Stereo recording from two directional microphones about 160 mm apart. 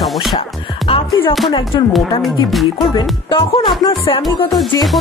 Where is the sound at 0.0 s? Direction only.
Centre (ahead or behind).